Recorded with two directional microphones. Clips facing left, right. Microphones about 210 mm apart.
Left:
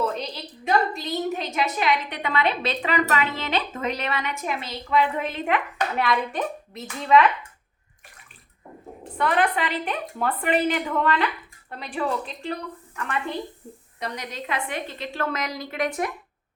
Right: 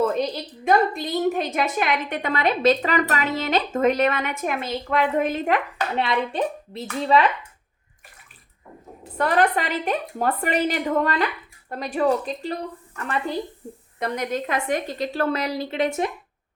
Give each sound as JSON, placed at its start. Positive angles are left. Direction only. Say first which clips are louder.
{"t": 0.0, "sound": "a woman's voice", "louder": "right 5 dB", "side_deg": -50}
{"t": 6.0, "sound": "a woman's voice", "louder": "right 2 dB", "side_deg": -25}
{"t": 9.1, "sound": "a woman's voice", "louder": "right 2 dB", "side_deg": -40}
{"t": 13.6, "sound": "a woman's voice", "louder": "right 5 dB", "side_deg": -45}